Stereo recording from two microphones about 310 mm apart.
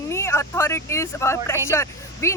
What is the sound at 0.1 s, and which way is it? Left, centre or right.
Speech, centre.